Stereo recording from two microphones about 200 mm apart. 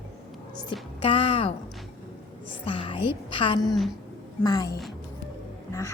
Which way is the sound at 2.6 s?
25° left (ahead or behind).